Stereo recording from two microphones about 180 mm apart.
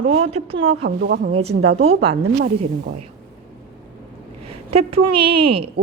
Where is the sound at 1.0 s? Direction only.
60° right (ahead or behind).